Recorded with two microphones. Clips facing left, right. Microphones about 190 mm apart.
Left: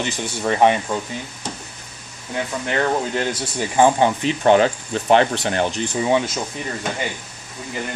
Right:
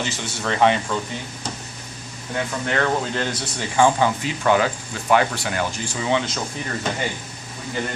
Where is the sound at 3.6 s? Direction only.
20° left (ahead or behind).